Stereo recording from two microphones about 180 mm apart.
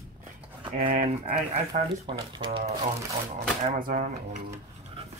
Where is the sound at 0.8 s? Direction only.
50° right (ahead or behind).